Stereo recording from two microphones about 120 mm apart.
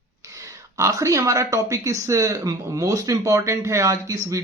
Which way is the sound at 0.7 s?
25° right (ahead or behind).